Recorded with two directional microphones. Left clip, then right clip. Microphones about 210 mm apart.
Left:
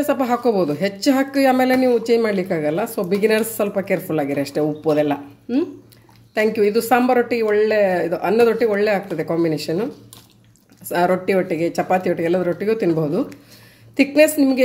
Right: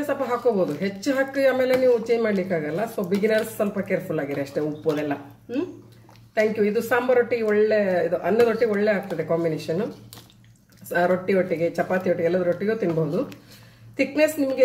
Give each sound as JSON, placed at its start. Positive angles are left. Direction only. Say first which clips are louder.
{"t": 0.0, "sound": "speech", "louder": "left 4 dB", "side_deg": 45}
{"t": 10.9, "sound": "speech", "louder": "left 4 dB", "side_deg": 45}
{"t": 13.9, "sound": "a woman's voice", "louder": "left 6 dB", "side_deg": 40}